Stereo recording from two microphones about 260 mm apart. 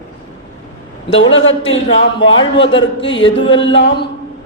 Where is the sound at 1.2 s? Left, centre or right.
Left.